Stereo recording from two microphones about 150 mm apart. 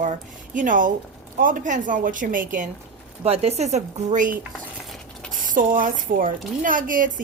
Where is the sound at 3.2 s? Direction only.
45° right (ahead or behind); by 4.4 s 60° right (ahead or behind).